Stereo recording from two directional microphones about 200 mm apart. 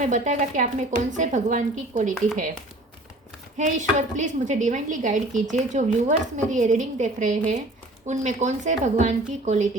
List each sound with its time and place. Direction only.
0.0 s a woman's voice: 40° right (ahead or behind)
3.6 s a woman's voice: 35° right (ahead or behind)